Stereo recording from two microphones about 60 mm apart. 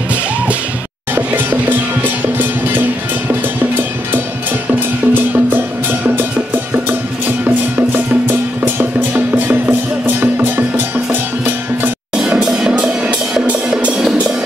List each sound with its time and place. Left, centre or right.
1.1 s music: right
4.7 s music: right
12.2 s music: centre